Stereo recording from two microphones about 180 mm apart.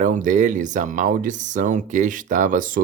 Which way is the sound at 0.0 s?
45° right (ahead or behind).